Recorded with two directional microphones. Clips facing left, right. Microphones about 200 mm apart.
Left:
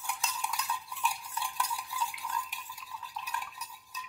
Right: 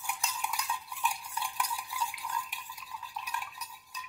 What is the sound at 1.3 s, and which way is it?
Stir, 15° right (ahead or behind).